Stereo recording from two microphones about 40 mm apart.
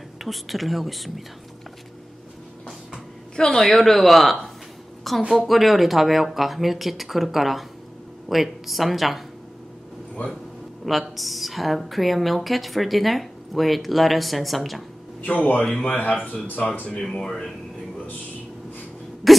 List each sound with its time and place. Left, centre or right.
0.2 s a woman's voice: centre
3.3 s a woman's voice: left
3.6 s a woman's voice: centre
10.2 s speech: left
10.9 s a woman's voice: centre
15.2 s speech: left
17.0 s speech: centre
19.2 s a sound: centre